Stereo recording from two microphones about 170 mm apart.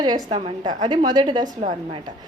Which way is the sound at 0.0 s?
25° right (ahead or behind).